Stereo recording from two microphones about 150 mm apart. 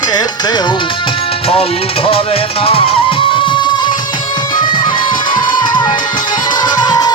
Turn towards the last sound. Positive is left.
turn(degrees=25)  # may be behind; listen again after turning